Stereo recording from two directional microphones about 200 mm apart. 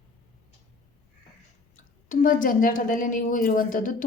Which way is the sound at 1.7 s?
40° left (ahead or behind).